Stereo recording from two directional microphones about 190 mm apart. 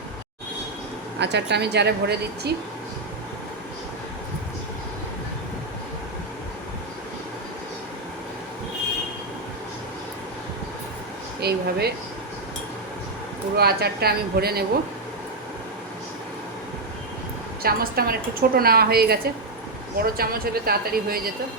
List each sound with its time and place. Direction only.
1.2 s a woman's voice: 65° right (ahead or behind)
11.3 s a woman's voice: 55° right (ahead or behind)
13.6 s a woman's voice: 55° right (ahead or behind)
17.6 s a woman's voice: 55° right (ahead or behind)